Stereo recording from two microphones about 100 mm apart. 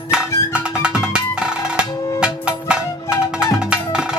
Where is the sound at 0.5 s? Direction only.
10° right (ahead or behind).